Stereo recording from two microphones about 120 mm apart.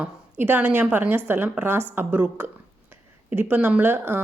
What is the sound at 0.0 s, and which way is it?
A woman's voice, 15° right (ahead or behind).